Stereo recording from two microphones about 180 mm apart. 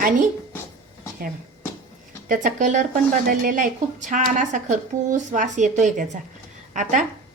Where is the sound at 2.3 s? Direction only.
45° right (ahead or behind).